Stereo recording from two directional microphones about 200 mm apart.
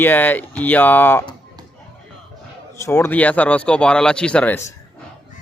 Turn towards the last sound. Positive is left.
turn(degrees=5)  # may be behind; listen again after turning